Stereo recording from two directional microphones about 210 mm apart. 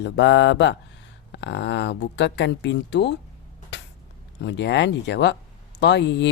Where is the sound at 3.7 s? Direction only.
55° left (ahead or behind).